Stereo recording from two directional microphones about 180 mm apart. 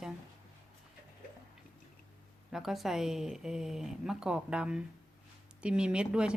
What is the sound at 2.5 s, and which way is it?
Speech, centre (ahead or behind).